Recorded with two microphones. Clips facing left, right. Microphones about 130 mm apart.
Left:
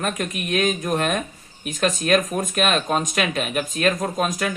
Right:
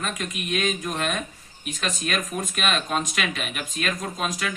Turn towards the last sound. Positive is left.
turn(degrees=50)  # may be behind; listen again after turning